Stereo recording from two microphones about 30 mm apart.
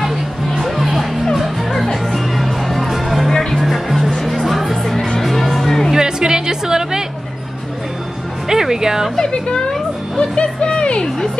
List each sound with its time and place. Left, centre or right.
0.0 s music: centre
3.3 s music: centre
3.6 s music: centre
4.9 s music: left
5.2 s music: centre
5.9 s music: right
8.5 s music: centre
9.1 s a woman's voice: left
10.3 s a sound: left
10.8 s music: left